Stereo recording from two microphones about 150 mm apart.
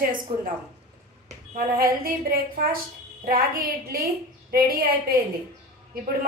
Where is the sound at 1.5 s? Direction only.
85° right.